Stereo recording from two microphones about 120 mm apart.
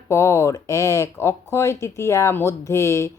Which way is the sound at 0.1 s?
25° left (ahead or behind).